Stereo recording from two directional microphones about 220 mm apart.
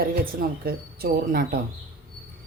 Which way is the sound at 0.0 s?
45° right (ahead or behind).